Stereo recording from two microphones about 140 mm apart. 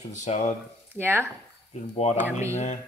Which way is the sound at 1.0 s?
15° right (ahead or behind).